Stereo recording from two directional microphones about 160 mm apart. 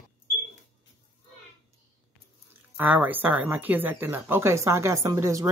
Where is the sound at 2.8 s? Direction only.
10° right (ahead or behind).